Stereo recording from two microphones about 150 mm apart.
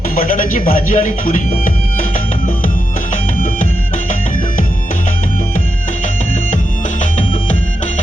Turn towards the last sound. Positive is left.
turn(degrees=55)  # may be behind; listen again after turning